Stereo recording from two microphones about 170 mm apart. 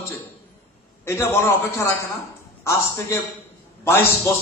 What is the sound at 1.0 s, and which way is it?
Speech, 15° left (ahead or behind).